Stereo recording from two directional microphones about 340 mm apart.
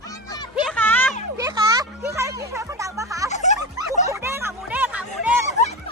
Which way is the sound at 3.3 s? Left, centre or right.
Left.